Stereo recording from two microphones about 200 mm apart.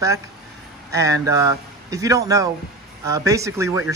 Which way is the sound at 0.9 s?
15° right (ahead or behind).